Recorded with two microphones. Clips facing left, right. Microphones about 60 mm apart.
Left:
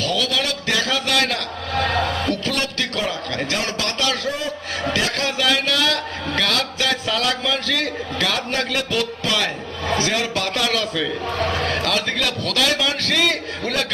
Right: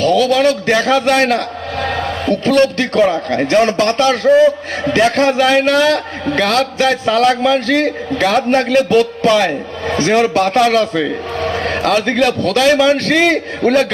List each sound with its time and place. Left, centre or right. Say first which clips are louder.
0.0 s a man's voice: right 11 dB; right